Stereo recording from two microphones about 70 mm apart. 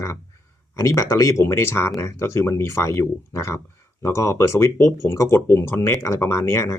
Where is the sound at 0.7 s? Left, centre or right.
Left.